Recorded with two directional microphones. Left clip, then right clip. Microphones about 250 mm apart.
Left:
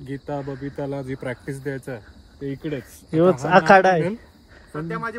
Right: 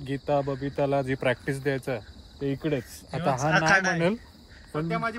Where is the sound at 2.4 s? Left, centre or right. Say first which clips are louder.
Right 1 dB; right.